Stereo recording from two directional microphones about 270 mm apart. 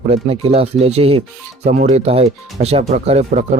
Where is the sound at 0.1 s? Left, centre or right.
Right.